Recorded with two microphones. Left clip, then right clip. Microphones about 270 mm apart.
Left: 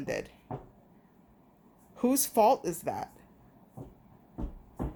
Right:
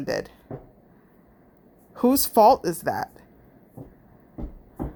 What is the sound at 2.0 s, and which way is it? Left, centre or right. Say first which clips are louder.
Speech: right 8 dB; right.